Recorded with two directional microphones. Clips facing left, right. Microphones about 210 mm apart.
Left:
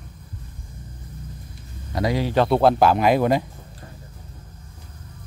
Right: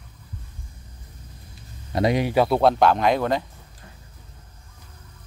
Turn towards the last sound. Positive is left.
turn(degrees=10)  # may be behind; listen again after turning